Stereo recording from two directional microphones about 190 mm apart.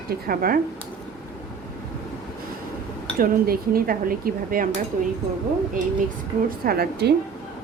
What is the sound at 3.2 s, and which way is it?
Speech, 50° right (ahead or behind).